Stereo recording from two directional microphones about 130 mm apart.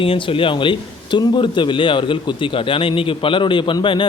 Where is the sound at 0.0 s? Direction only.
45° left (ahead or behind).